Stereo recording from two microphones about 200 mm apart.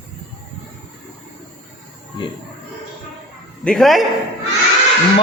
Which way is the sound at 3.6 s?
Centre (ahead or behind).